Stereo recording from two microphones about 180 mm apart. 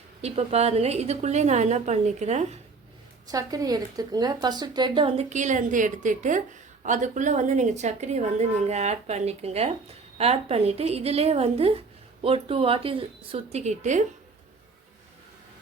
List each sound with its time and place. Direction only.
0.2 s speech: 35° right (ahead or behind)
3.2 s speech: 20° right (ahead or behind); by 14.0 s 40° right (ahead or behind)